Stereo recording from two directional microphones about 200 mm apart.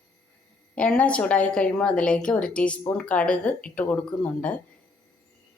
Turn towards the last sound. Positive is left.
turn(degrees=5)  # may be behind; listen again after turning